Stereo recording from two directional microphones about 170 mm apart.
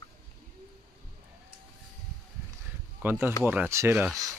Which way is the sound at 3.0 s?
15° right (ahead or behind).